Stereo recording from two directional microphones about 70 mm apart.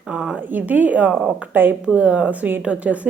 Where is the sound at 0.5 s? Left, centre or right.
Right.